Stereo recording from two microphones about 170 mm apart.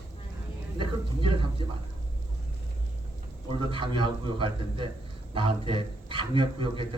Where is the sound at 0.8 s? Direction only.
30° right (ahead or behind).